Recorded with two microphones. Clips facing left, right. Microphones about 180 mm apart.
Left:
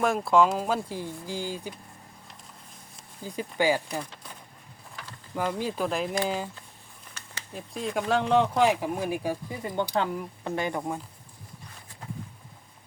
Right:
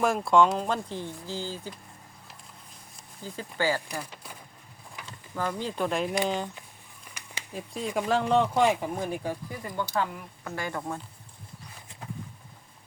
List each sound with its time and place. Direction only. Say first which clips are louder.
0.0 s speech: even; centre (ahead or behind)
3.2 s speech: left 3 dB; 15° left (ahead or behind)
4.0 s speech: left 1 dB; 10° right (ahead or behind)
5.3 s speech: left 2 dB; 10° left (ahead or behind)
7.1 s a sound: right 1 dB; 15° right (ahead or behind)
7.5 s speech: even; centre (ahead or behind)
9.5 s speech: left 3 dB; 25° left (ahead or behind)